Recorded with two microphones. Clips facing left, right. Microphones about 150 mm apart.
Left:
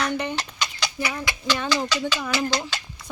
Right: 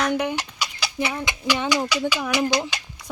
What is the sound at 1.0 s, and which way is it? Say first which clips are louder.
Speech: right 3 dB; 25° right (ahead or behind).